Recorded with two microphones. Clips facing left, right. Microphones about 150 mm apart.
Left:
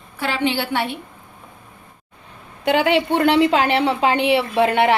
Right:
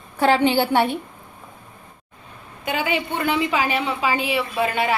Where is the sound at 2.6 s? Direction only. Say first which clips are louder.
Left 7 dB; 70° left (ahead or behind).